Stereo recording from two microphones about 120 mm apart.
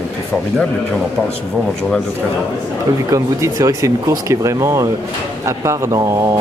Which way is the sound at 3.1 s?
30° right (ahead or behind).